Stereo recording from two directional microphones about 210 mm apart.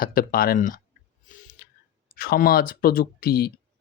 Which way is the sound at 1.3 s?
40° left (ahead or behind).